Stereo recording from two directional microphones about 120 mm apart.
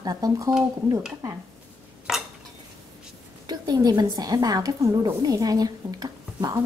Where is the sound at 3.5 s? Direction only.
35° right (ahead or behind).